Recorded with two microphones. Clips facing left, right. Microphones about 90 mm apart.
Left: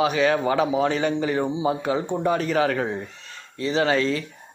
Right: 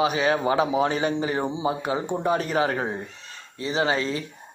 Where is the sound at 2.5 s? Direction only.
30° right (ahead or behind).